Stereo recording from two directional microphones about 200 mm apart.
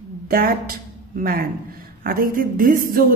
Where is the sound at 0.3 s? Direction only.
45° right (ahead or behind).